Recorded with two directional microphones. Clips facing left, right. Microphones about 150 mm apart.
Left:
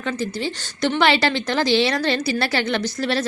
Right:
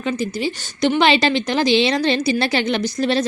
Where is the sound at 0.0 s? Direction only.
15° right (ahead or behind).